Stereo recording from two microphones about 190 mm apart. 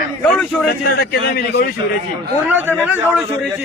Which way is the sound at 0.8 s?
55° left (ahead or behind).